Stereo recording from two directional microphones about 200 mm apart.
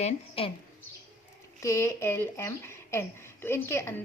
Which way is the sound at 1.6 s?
15° left (ahead or behind).